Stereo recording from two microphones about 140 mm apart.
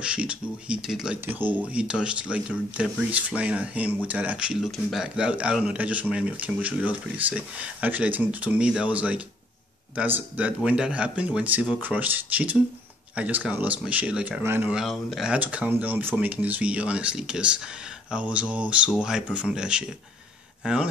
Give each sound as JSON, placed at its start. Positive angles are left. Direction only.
{"t": 0.0, "sound": "speech", "side_deg": -10}
{"t": 14.7, "sound": "speech", "side_deg": 0}